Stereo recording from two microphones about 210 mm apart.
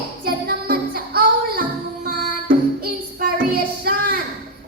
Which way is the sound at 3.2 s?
45° right (ahead or behind).